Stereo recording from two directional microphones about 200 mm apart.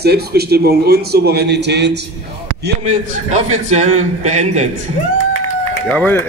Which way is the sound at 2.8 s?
35° right (ahead or behind).